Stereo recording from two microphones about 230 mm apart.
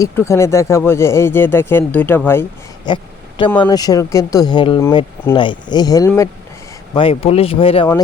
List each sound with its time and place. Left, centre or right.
0.0 s speech: centre
6.9 s speech: left